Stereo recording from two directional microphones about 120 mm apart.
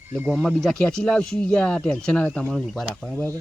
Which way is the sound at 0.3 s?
5° left (ahead or behind).